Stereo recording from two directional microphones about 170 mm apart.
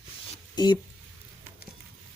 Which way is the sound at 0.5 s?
25° left (ahead or behind).